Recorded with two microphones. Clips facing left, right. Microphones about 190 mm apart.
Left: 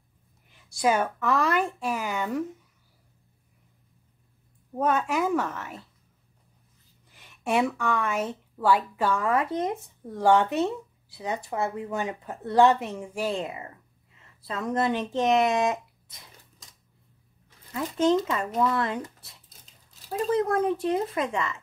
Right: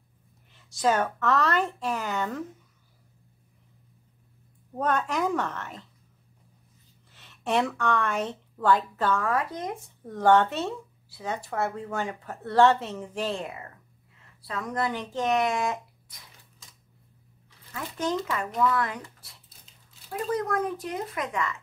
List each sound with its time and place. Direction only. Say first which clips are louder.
0.7 s speech: left 1 dB; 10° left (ahead or behind)
4.7 s speech: left 2 dB; 5° left (ahead or behind)
7.2 s speech: left 1 dB; 10° left (ahead or behind)
10.0 s speech: even; 10° left (ahead or behind)
14.4 s speech: left 3 dB; 25° left (ahead or behind)
17.7 s speech: left 7 dB; 25° left (ahead or behind)
20.3 s speech: left 5 dB; 25° left (ahead or behind)